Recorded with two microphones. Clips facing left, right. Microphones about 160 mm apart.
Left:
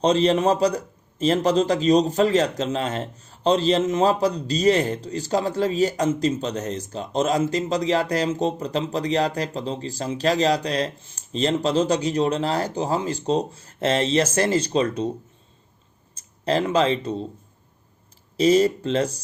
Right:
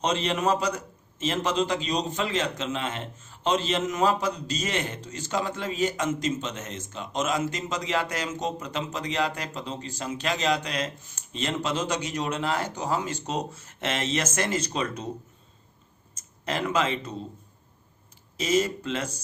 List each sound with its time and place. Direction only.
0.0 s a man's voice: 35° left (ahead or behind)
16.1 s speech: 30° left (ahead or behind)
18.3 s a man's voice: 35° left (ahead or behind)